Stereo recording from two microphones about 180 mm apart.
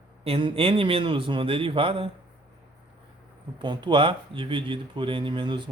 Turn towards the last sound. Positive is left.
turn(degrees=-25)  # may be behind; listen again after turning